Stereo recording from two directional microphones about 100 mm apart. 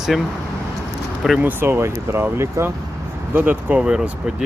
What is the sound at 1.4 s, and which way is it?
Speech, 20° right (ahead or behind).